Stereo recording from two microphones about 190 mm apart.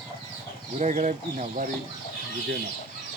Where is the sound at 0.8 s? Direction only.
40° right (ahead or behind).